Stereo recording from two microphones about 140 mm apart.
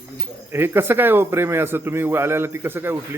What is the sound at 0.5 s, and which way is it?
Speech, 15° right (ahead or behind).